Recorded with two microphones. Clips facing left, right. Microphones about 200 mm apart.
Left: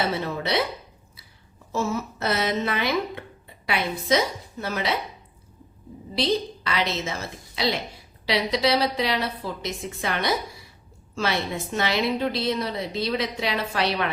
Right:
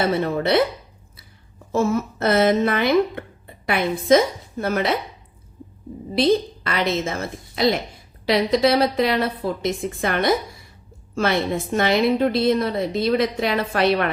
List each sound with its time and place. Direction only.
0.0 s speech: 55° right (ahead or behind)
1.7 s speech: 55° right (ahead or behind)
6.1 s speech: 50° right (ahead or behind)